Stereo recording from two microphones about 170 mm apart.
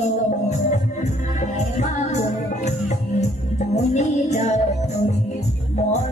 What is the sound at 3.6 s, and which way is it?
Music, 40° left (ahead or behind).